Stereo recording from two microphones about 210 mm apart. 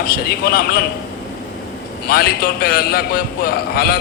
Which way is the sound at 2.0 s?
45° left (ahead or behind).